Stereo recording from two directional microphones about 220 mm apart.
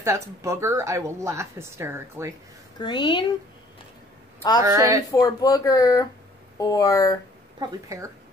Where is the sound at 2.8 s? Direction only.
20° left (ahead or behind).